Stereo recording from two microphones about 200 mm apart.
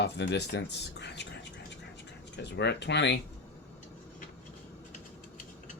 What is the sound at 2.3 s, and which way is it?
Speech, 60° left (ahead or behind).